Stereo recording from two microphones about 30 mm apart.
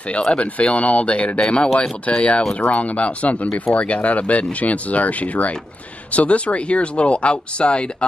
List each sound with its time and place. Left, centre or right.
0.2 s speech: left
0.6 s speech: left
6.1 s speech: left